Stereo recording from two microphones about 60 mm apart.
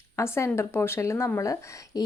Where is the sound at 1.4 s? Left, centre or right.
Left.